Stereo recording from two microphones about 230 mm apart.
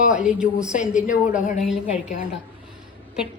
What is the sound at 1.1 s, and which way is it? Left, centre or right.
Speech, left.